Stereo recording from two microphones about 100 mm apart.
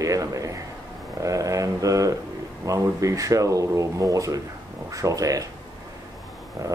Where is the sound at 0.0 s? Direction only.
35° right (ahead or behind).